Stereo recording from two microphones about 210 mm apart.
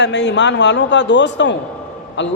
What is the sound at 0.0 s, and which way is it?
A man's voice, 55° left (ahead or behind).